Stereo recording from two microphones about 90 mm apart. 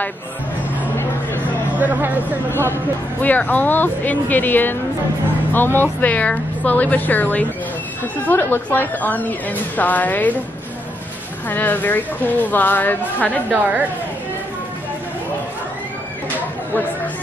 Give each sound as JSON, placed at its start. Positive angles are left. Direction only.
{"t": 1.8, "sound": "speech", "side_deg": -20}
{"t": 3.2, "sound": "a woman's voice", "side_deg": 20}
{"t": 11.4, "sound": "a woman's voice", "side_deg": 20}
{"t": 13.5, "sound": "a woman's voice", "side_deg": -20}